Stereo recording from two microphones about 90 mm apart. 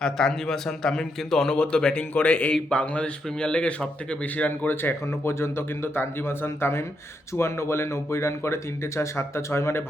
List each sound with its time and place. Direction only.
0.0 s a man's voice: 5° left (ahead or behind); by 9.8 s 30° left (ahead or behind)